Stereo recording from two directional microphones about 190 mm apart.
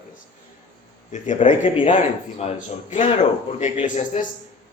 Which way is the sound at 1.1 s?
40° left (ahead or behind).